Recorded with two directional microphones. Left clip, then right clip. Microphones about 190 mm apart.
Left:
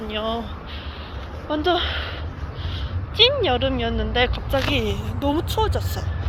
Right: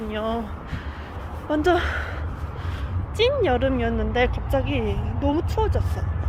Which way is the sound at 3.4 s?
20° right (ahead or behind).